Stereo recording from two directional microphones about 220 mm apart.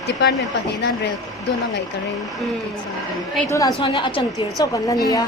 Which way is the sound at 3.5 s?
15° left (ahead or behind).